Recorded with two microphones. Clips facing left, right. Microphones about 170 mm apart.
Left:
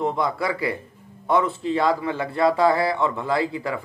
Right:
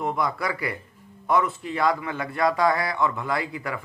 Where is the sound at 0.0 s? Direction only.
25° left (ahead or behind).